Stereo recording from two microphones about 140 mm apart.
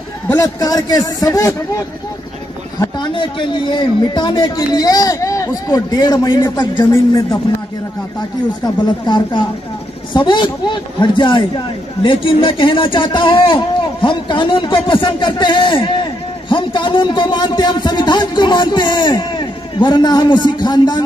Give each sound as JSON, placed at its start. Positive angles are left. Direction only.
{"t": 0.3, "sound": "a man's voice", "side_deg": 25}
{"t": 3.0, "sound": "a man's voice", "side_deg": 35}
{"t": 9.0, "sound": "speech", "side_deg": 35}